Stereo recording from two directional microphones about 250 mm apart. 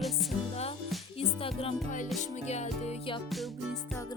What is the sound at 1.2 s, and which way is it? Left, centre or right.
Music, left.